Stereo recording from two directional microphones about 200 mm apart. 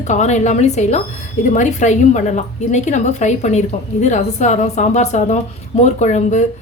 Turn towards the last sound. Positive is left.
turn(degrees=35)  # may be behind; listen again after turning